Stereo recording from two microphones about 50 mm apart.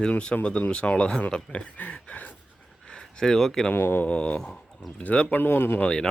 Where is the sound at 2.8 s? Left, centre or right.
Centre.